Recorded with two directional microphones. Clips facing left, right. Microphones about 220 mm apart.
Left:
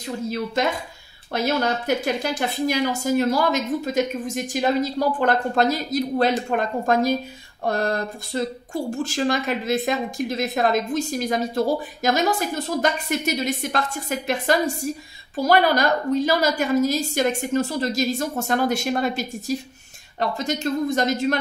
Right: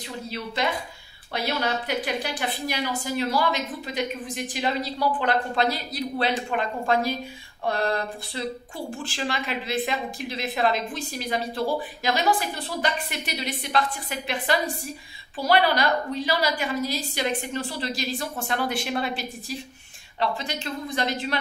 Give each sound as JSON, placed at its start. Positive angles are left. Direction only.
{"t": 1.3, "sound": "speech", "side_deg": 45}